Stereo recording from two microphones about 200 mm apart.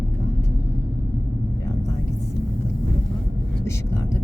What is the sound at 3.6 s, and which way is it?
Vehicle, 15° left (ahead or behind).